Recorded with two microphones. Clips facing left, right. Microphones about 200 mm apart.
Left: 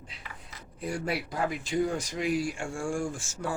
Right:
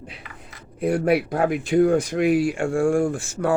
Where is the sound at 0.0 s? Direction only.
65° right (ahead or behind).